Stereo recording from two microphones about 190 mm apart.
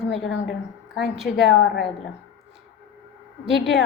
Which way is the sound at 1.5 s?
70° left (ahead or behind).